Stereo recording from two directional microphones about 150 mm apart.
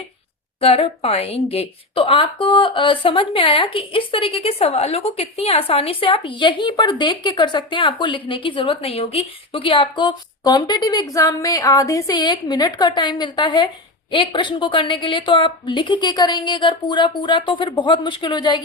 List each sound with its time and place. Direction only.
0.6 s a woman's voice: 40° left (ahead or behind)